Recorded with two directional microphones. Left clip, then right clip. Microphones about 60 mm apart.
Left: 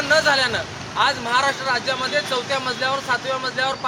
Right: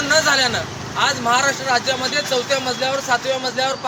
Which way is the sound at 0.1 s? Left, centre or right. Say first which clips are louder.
Right 1 dB; left.